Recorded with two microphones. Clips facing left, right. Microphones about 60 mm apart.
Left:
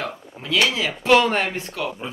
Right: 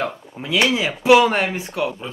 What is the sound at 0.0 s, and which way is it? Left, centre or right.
Speech, centre.